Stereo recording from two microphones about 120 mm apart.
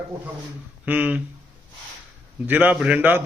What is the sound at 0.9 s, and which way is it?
Speech, 15° right (ahead or behind).